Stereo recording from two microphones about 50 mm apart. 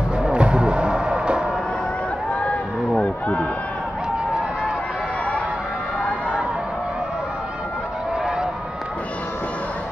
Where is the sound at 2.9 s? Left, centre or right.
Left.